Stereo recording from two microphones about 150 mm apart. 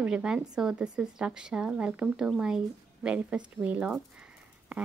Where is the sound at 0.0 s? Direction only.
5° right (ahead or behind).